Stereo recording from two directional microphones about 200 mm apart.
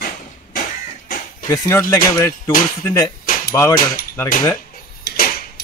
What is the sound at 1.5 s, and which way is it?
Speech, 15° left (ahead or behind).